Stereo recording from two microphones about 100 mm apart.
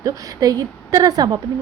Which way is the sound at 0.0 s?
40° right (ahead or behind).